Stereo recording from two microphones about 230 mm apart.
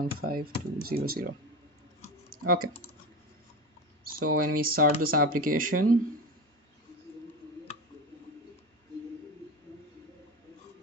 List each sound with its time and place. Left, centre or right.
0.0 s speech: right
2.2 s typing: right
4.0 s speech: right